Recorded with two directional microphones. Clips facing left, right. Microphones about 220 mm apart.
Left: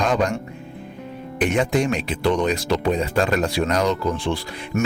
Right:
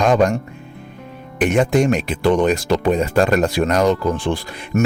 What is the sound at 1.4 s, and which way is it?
Speech, 45° right (ahead or behind).